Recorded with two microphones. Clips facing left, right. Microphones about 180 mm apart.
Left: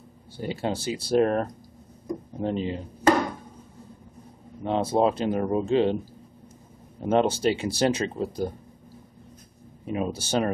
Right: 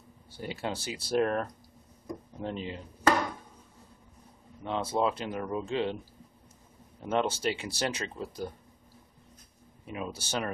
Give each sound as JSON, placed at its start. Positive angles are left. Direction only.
{"t": 0.4, "sound": "speech", "side_deg": 30}
{"t": 4.6, "sound": "speech", "side_deg": 30}
{"t": 7.0, "sound": "speech", "side_deg": 35}
{"t": 9.8, "sound": "speech", "side_deg": 30}